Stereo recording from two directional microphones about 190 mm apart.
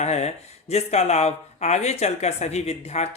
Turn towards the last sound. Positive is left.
turn(degrees=35)  # may be behind; listen again after turning